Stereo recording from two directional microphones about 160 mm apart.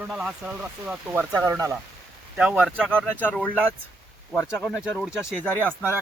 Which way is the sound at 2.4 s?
5° right (ahead or behind).